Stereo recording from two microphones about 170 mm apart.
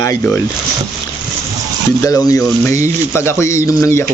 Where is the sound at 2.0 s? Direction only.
20° left (ahead or behind).